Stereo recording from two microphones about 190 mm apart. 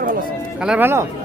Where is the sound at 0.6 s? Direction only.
5° right (ahead or behind).